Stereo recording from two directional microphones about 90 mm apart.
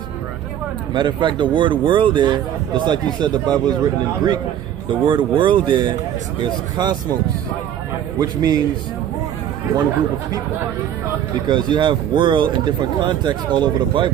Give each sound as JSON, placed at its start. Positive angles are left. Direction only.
{"t": 0.9, "sound": "a man's voice", "side_deg": -60}
{"t": 4.8, "sound": "a man's voice", "side_deg": -65}
{"t": 6.4, "sound": "speech", "side_deg": -50}
{"t": 8.2, "sound": "speech", "side_deg": -50}
{"t": 11.4, "sound": "a man's voice", "side_deg": -55}